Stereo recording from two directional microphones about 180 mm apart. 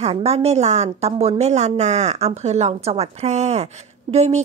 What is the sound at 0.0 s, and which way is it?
A woman's voice, 35° right (ahead or behind).